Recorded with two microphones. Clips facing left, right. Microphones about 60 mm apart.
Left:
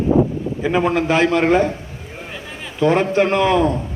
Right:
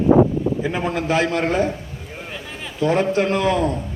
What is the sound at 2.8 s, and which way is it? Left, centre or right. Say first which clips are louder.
Speech: left 3 dB; left.